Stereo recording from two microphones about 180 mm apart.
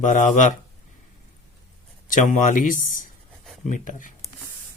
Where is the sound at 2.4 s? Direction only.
45° left (ahead or behind).